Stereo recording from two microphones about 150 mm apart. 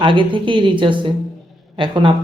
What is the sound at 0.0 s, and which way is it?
Speech, 35° right (ahead or behind).